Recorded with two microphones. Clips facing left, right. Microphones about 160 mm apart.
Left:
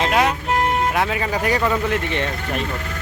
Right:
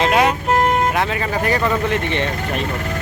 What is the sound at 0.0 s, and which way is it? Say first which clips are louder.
Speech: right 3 dB; centre (ahead or behind).